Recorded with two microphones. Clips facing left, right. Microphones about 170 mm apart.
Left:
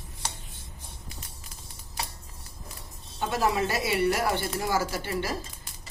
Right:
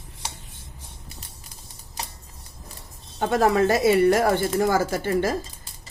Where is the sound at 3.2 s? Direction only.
50° right (ahead or behind).